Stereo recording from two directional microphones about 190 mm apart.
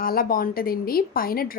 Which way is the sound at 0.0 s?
50° left (ahead or behind).